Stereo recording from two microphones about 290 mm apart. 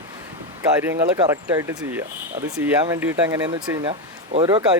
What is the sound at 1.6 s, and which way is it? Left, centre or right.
Speech, centre.